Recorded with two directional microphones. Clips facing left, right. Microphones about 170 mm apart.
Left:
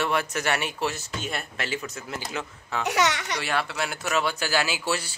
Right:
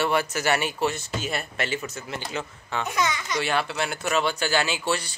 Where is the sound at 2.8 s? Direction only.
75° left (ahead or behind).